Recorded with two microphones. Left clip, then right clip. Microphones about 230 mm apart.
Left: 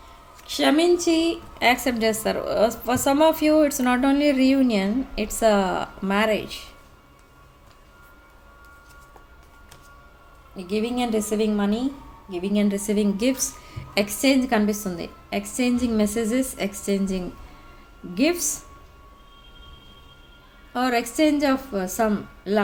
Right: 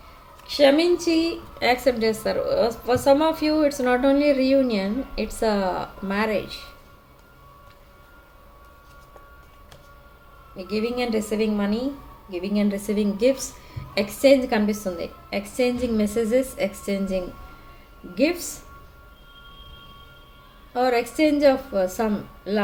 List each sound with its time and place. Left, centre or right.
0.4 s a woman's voice: left
10.7 s a woman's voice: left
12.5 s a woman's voice: left
20.7 s a woman's voice: left